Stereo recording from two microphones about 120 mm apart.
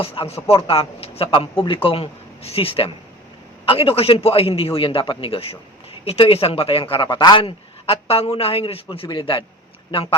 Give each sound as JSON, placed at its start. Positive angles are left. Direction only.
{"t": 0.0, "sound": "a man's voice", "side_deg": 50}